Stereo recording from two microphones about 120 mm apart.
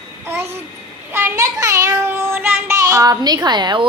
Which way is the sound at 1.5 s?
30° right (ahead or behind).